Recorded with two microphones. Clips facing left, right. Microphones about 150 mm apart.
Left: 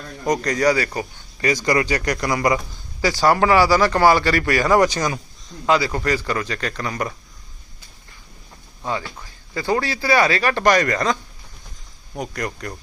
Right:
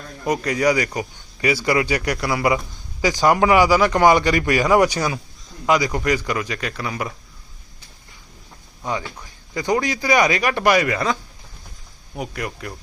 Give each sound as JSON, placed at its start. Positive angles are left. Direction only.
{"t": 0.3, "sound": "speech", "side_deg": -10}
{"t": 0.9, "sound": "a sound", "side_deg": -10}
{"t": 1.6, "sound": "speech", "side_deg": -10}
{"t": 9.6, "sound": "speech", "side_deg": -15}